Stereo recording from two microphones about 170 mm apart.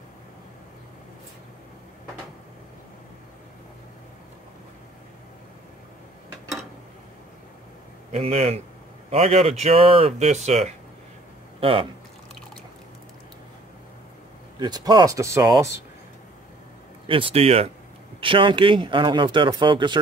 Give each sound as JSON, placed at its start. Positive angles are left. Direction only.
{"t": 8.1, "sound": "speech", "side_deg": -40}
{"t": 14.6, "sound": "speech", "side_deg": -25}
{"t": 17.1, "sound": "speech", "side_deg": -35}